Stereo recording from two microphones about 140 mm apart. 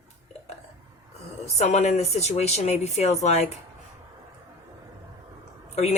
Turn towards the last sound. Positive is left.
turn(degrees=50)  # may be behind; listen again after turning